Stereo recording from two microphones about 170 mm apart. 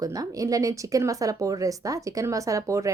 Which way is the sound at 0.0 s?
20° right (ahead or behind).